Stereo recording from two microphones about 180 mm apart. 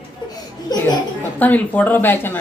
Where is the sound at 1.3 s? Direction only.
10° left (ahead or behind).